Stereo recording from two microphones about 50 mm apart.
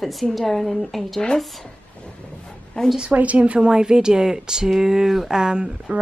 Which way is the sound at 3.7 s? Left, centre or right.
Centre.